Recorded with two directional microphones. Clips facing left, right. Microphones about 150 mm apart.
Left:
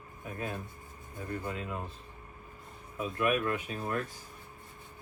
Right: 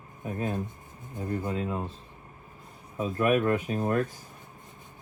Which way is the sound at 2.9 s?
35° right (ahead or behind).